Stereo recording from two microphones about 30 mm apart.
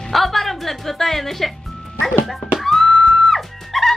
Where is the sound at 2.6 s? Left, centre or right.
Centre.